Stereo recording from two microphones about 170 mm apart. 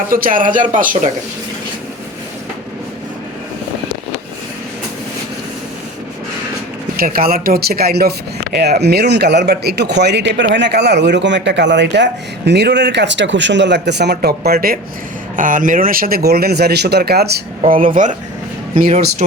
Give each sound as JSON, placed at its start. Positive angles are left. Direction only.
{"t": 0.1, "sound": "speech", "side_deg": -55}
{"t": 6.9, "sound": "speech", "side_deg": -60}
{"t": 15.4, "sound": "speech", "side_deg": -50}